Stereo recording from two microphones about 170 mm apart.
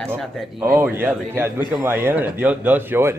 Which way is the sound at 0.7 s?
10° right (ahead or behind).